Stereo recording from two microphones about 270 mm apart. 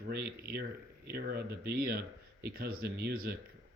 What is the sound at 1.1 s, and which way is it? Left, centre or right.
Speech, right.